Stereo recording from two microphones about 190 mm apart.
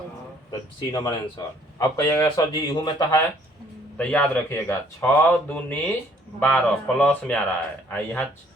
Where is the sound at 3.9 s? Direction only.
5° left (ahead or behind).